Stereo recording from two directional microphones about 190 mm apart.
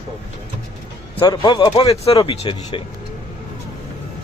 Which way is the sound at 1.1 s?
25° left (ahead or behind).